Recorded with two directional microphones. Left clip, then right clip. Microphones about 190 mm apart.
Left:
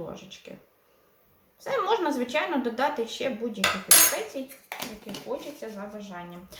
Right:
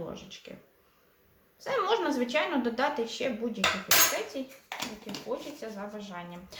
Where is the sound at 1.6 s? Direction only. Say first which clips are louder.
Left 2 dB; 5° left (ahead or behind).